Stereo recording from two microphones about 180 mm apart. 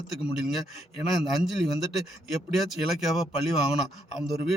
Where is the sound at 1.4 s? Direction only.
Centre (ahead or behind).